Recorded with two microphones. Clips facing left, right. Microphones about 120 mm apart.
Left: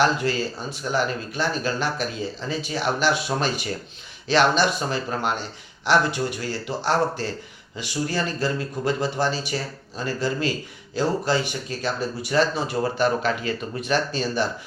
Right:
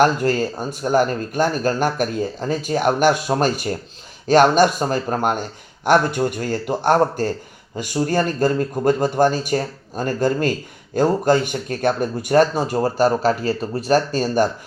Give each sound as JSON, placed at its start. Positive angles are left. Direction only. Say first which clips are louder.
{"t": 0.0, "sound": "speech", "louder": "right 5 dB", "side_deg": -45}